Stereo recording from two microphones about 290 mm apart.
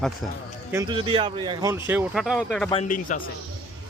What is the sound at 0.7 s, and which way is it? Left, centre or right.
Speech, centre.